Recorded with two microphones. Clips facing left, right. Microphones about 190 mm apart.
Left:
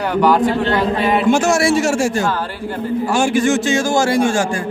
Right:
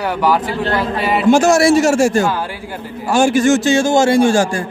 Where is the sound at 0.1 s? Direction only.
5° right (ahead or behind).